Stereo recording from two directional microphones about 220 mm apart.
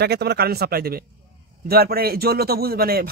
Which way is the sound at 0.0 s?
50° right (ahead or behind).